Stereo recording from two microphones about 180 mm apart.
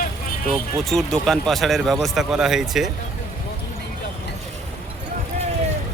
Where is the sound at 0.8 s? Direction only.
Centre (ahead or behind).